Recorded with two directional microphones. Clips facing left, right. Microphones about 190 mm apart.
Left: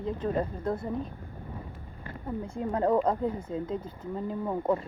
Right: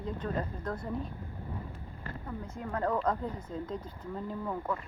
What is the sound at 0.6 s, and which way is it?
Speech, 30° left (ahead or behind).